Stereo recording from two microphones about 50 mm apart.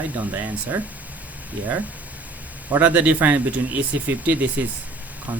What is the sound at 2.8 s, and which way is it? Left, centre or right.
Speech, right.